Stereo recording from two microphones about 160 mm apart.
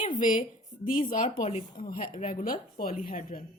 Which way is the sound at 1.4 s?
40° left (ahead or behind).